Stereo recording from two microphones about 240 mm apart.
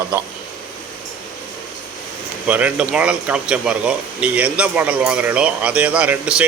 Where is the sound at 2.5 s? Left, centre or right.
Centre.